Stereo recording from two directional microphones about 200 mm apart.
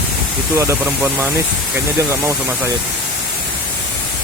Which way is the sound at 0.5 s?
15° right (ahead or behind).